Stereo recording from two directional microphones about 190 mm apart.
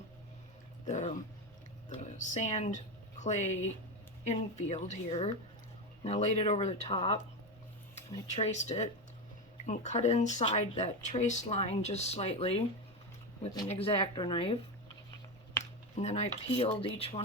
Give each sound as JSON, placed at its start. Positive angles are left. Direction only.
{"t": 0.9, "sound": "speech", "side_deg": 35}
{"t": 2.1, "sound": "speech", "side_deg": 40}
{"t": 13.5, "sound": "speech", "side_deg": 20}
{"t": 13.7, "sound": "speech", "side_deg": 30}
{"t": 16.0, "sound": "speech", "side_deg": 35}